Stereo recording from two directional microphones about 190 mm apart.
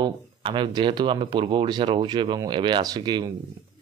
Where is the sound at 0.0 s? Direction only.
25° right (ahead or behind).